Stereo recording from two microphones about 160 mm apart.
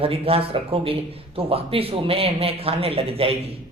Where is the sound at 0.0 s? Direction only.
35° right (ahead or behind).